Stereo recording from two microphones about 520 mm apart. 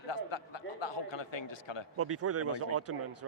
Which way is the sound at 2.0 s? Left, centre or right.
Right.